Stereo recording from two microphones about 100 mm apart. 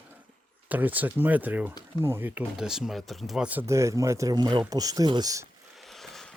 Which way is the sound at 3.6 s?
30° right (ahead or behind).